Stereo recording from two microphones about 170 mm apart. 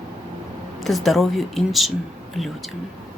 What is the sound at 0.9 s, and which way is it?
Speech, centre (ahead or behind).